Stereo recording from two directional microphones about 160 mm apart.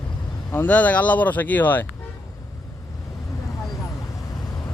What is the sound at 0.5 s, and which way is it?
Speech, 10° left (ahead or behind).